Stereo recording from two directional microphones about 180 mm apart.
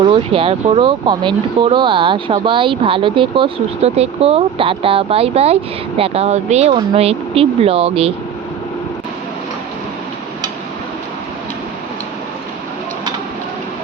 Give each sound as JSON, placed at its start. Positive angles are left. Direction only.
{"t": 0.0, "sound": "speech", "side_deg": -25}